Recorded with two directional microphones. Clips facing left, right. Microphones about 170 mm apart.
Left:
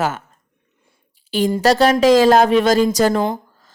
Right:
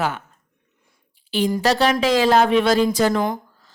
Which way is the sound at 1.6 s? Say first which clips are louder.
Left 7 dB; 40° left (ahead or behind).